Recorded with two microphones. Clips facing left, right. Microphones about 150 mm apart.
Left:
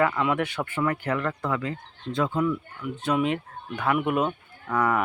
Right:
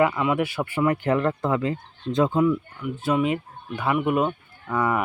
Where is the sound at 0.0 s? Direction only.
5° right (ahead or behind).